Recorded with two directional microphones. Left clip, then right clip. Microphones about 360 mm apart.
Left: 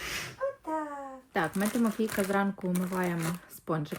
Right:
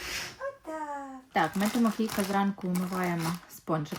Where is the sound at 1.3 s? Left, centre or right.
Centre.